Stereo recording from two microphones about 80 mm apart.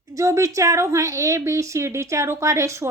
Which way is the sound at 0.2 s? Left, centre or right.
Right.